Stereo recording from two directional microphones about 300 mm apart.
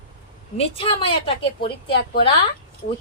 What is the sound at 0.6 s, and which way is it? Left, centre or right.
Speech, centre.